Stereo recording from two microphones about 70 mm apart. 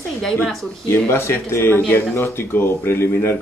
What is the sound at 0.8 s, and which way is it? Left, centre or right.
Speech, left.